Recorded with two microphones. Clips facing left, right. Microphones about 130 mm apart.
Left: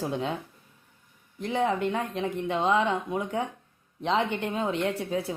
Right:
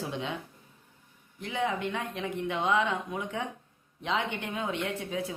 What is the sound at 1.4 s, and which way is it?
Speech, 40° left (ahead or behind).